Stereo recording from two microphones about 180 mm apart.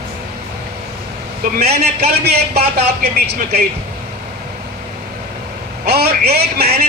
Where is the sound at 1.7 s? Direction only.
65° right (ahead or behind).